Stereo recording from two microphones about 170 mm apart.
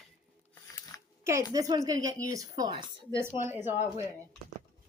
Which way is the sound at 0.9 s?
20° left (ahead or behind).